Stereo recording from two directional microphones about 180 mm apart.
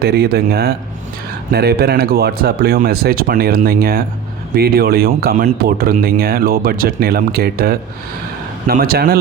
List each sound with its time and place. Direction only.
0.0 s speech: 60° right (ahead or behind)